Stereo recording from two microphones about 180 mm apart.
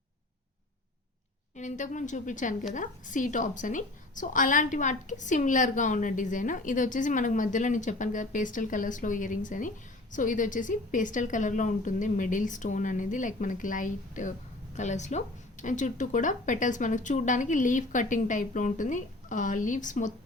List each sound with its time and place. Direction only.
1.5 s a woman's voice: 45° left (ahead or behind)